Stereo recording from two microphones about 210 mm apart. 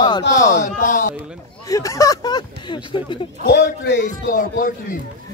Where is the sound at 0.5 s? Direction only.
35° left (ahead or behind).